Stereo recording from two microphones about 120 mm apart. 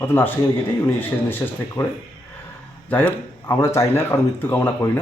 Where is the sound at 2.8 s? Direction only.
15° left (ahead or behind).